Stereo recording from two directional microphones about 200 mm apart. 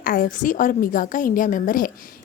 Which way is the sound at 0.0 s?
45° left (ahead or behind).